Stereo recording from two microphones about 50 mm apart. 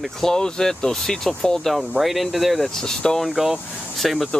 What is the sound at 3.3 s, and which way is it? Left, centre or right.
Speech, centre.